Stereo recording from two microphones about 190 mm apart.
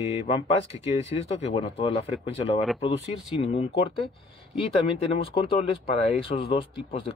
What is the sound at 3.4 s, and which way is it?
Speech, 30° left (ahead or behind).